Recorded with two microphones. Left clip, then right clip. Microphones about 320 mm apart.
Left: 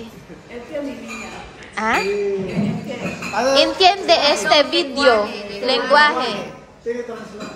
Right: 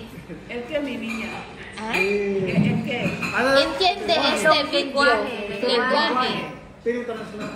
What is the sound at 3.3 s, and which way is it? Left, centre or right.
A woman's voice, left.